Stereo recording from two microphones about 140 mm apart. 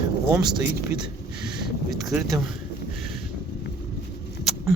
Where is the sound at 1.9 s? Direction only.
Centre (ahead or behind).